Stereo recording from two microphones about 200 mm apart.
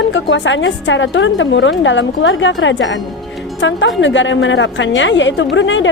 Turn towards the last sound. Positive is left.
turn(degrees=70)  # may be behind; listen again after turning